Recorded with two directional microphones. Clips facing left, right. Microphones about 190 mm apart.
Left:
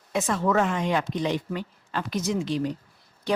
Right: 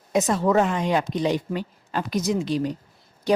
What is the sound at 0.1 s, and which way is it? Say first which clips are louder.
Speech: right 4 dB; 40° right (ahead or behind).